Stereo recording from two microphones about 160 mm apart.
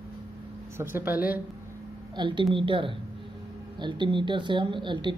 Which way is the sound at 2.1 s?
30° right (ahead or behind).